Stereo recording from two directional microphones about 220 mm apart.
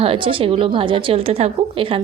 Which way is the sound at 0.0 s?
25° right (ahead or behind).